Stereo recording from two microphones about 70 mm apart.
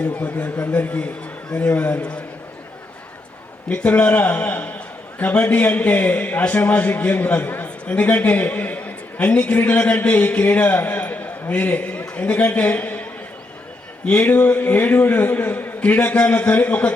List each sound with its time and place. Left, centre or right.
0.0 s a man's voice: left
3.7 s a man's voice: left